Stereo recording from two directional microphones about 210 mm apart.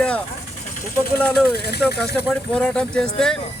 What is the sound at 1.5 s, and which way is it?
Speech, 50° left (ahead or behind).